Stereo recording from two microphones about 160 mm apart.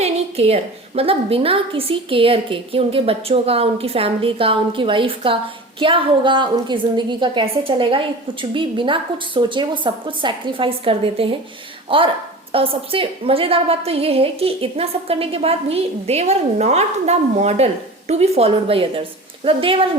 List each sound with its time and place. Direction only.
0.0 s a woman's voice: 40° right (ahead or behind)